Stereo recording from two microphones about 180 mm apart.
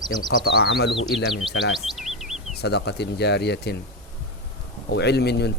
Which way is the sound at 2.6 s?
70° left (ahead or behind).